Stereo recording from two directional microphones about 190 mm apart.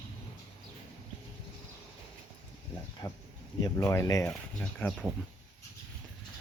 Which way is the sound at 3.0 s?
15° left (ahead or behind).